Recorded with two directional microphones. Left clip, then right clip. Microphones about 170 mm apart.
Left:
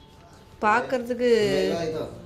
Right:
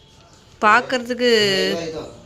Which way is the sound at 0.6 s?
10° right (ahead or behind).